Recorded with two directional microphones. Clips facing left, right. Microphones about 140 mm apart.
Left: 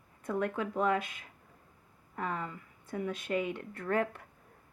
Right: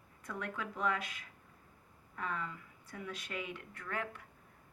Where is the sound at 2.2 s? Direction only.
40° left (ahead or behind).